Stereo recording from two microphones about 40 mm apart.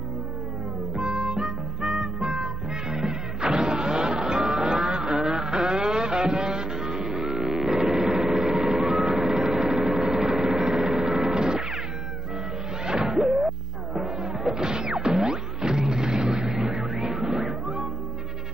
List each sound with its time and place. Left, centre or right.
0.9 s music: centre
4.7 s a sound: centre
7.7 s vehicle: centre
12.8 s music: centre